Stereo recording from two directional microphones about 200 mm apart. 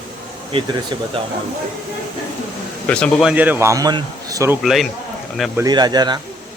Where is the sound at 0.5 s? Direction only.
25° right (ahead or behind).